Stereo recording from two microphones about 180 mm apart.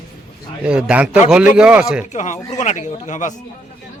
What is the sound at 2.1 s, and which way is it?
Speech, 40° left (ahead or behind).